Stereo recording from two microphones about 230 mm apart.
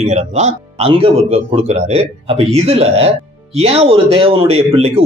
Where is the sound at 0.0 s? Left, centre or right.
Right.